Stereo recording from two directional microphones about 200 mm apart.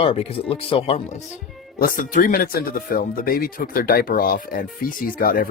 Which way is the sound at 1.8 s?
45° left (ahead or behind).